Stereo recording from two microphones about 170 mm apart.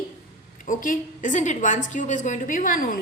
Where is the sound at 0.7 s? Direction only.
50° left (ahead or behind).